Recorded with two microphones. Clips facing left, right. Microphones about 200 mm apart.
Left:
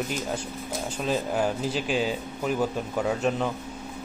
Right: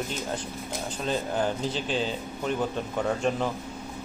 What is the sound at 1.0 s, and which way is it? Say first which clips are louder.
A man's voice: left 2 dB; 5° left (ahead or behind).